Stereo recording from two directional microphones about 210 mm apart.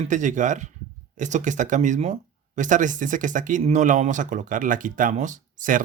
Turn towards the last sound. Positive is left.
turn(degrees=-40)  # may be behind; listen again after turning